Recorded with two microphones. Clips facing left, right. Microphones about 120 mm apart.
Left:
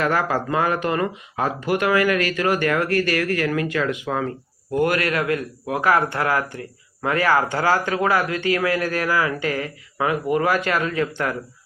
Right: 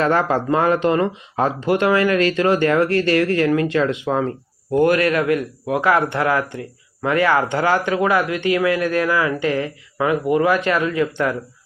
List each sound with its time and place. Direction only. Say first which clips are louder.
0.0 s speech: right 4 dB; 25° right (ahead or behind)